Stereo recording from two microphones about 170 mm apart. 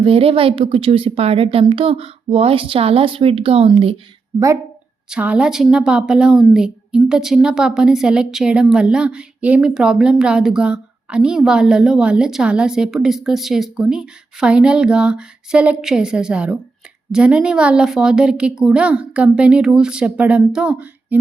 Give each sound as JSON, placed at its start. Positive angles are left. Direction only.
{"t": 0.0, "sound": "a woman's voice", "side_deg": -35}
{"t": 5.0, "sound": "a woman's voice", "side_deg": -5}